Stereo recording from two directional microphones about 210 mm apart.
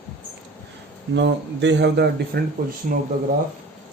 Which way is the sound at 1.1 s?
55° right (ahead or behind).